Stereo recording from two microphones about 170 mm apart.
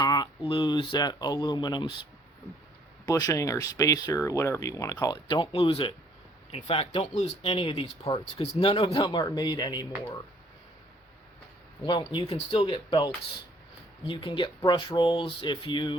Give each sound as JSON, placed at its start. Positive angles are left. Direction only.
{"t": 0.0, "sound": "speech", "side_deg": 25}
{"t": 3.1, "sound": "speech", "side_deg": 20}
{"t": 11.9, "sound": "speech", "side_deg": 25}
{"t": 12.3, "sound": "speech", "side_deg": 40}
{"t": 14.1, "sound": "speech", "side_deg": 30}